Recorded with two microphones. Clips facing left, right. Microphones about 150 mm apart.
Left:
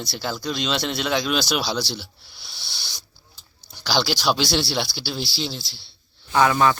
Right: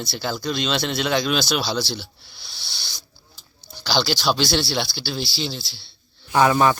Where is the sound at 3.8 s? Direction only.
5° left (ahead or behind).